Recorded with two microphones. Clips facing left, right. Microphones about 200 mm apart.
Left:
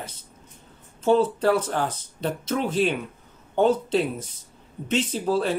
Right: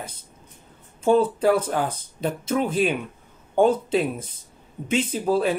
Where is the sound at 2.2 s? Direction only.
10° right (ahead or behind).